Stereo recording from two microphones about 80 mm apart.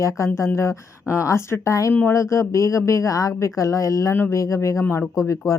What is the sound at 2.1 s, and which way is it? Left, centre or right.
Speech, left.